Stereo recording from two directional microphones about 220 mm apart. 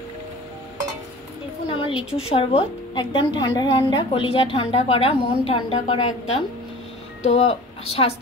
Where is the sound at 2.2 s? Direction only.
25° left (ahead or behind).